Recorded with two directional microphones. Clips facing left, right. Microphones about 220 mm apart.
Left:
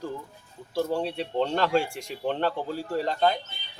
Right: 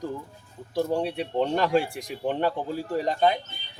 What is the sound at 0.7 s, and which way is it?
Speech, 15° right (ahead or behind).